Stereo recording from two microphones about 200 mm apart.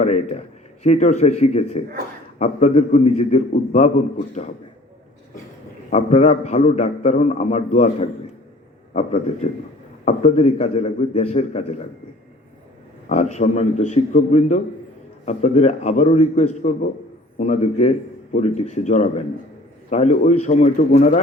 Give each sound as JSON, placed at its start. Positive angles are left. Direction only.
{"t": 0.0, "sound": "a man's voice", "side_deg": 35}
{"t": 5.9, "sound": "a man's voice", "side_deg": 35}
{"t": 13.1, "sound": "a man's voice", "side_deg": 35}